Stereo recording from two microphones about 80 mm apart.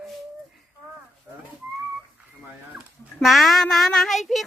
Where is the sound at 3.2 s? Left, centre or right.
Centre.